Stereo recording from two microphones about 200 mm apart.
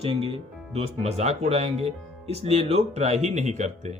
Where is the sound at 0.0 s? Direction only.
30° right (ahead or behind).